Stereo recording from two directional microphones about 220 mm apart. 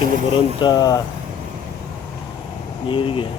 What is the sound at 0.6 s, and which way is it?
Speech, 20° left (ahead or behind).